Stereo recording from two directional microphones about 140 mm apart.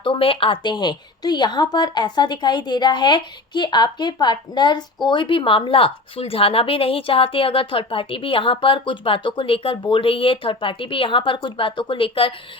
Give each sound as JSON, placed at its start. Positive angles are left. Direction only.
{"t": 0.0, "sound": "a woman's voice", "side_deg": 40}